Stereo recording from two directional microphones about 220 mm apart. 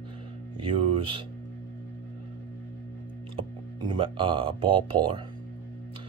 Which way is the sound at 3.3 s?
20° right (ahead or behind).